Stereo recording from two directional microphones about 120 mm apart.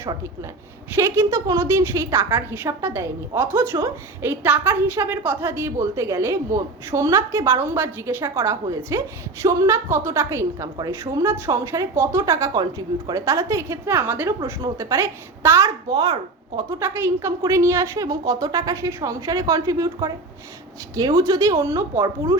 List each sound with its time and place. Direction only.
0.0 s a woman's voice: 25° right (ahead or behind)
15.9 s a child's voice: 35° right (ahead or behind)
16.6 s a woman's voice: 20° right (ahead or behind)